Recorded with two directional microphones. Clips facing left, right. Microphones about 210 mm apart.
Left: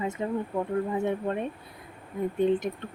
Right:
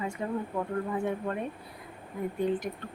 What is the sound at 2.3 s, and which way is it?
Speech, 25° left (ahead or behind).